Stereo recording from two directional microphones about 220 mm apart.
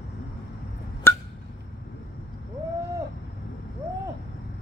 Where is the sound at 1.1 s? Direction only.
10° left (ahead or behind).